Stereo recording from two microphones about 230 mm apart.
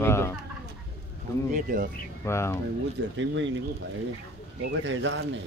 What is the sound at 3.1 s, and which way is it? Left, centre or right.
Speech, right.